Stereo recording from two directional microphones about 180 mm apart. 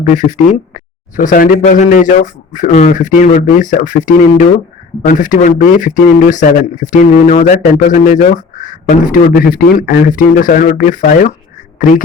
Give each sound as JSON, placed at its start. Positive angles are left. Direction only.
{"t": 0.0, "sound": "speech", "side_deg": 45}